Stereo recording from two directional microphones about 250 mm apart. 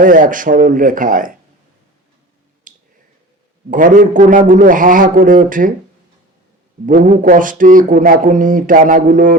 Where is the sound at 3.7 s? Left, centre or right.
Right.